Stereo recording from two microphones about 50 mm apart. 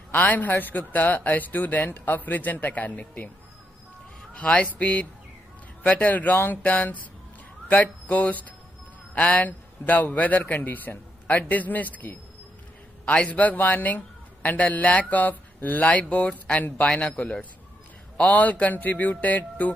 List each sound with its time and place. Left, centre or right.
0.1 s a man's voice: left
4.3 s a man's voice: left